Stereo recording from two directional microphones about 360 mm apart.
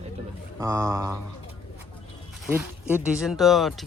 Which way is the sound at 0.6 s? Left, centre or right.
Centre.